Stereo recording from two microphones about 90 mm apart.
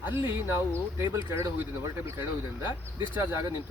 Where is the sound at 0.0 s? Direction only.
25° right (ahead or behind).